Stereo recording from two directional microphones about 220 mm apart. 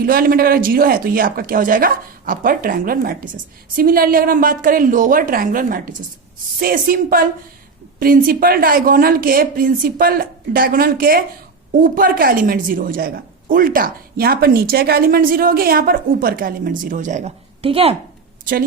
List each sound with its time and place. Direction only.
0.0 s a woman's voice: 40° right (ahead or behind); by 17.9 s 25° right (ahead or behind)